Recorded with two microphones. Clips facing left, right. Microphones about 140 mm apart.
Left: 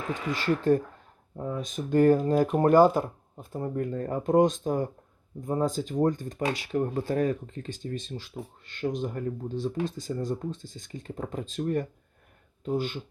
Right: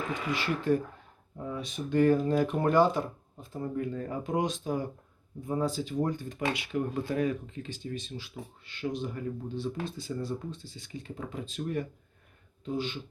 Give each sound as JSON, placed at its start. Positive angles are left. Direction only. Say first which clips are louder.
{"t": 0.4, "sound": "speech", "louder": "left 5 dB", "side_deg": 40}